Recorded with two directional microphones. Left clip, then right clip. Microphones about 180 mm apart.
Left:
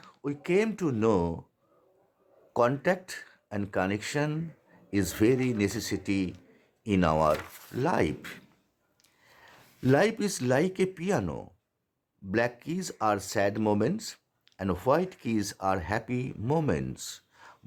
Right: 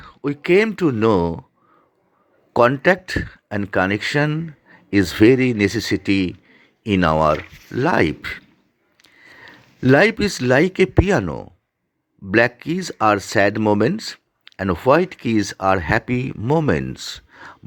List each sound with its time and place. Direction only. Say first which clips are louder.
0.2 s speech: right 11 dB; 30° right (ahead or behind)
2.5 s speech: right 11 dB; 30° right (ahead or behind)